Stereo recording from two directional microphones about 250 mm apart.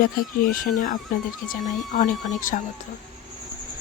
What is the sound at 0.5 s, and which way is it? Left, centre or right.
Speech, left.